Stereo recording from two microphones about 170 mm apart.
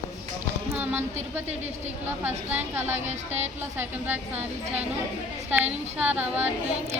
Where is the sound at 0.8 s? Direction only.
10° right (ahead or behind).